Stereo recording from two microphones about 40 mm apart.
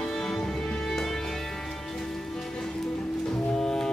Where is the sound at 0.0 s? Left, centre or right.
Centre.